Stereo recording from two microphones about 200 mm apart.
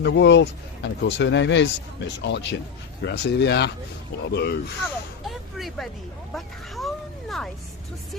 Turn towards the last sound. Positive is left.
turn(degrees=0)  # may be behind; listen again after turning